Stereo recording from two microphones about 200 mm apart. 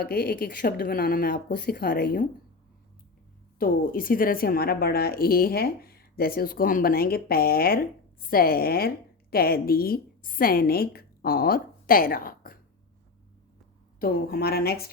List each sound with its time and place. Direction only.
0.0 s speech: 50° left (ahead or behind)
3.6 s a woman's voice: 45° left (ahead or behind)
14.0 s speech: 50° left (ahead or behind)